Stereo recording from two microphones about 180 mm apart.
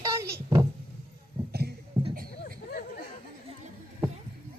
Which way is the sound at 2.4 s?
55° left (ahead or behind).